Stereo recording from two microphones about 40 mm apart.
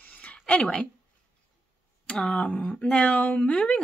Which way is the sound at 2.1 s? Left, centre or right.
Left.